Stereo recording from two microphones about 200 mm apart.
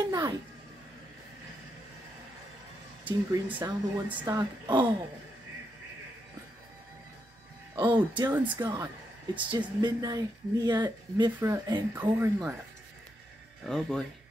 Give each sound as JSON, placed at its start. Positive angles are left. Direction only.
{"t": 0.0, "sound": "a sound", "side_deg": -20}
{"t": 3.4, "sound": "speech", "side_deg": -10}
{"t": 7.7, "sound": "speech", "side_deg": -25}
{"t": 8.3, "sound": "speech", "side_deg": -10}
{"t": 13.7, "sound": "speech", "side_deg": 0}